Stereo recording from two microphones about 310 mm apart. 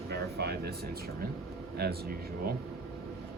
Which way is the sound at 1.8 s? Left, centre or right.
Right.